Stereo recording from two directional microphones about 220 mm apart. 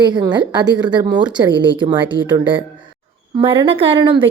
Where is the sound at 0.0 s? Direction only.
20° right (ahead or behind).